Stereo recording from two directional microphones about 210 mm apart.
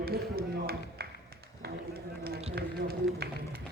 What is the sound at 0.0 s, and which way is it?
Run, 45° right (ahead or behind).